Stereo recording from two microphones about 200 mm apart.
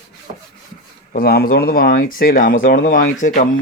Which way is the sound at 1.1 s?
50° left (ahead or behind).